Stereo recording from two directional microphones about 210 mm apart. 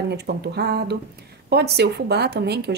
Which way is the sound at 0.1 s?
50° right (ahead or behind).